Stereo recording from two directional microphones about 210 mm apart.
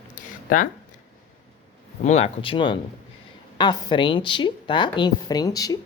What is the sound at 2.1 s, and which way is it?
A woman's voice, 30° left (ahead or behind).